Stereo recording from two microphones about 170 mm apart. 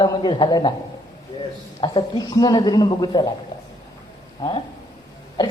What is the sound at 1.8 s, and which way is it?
A man's voice, 25° left (ahead or behind).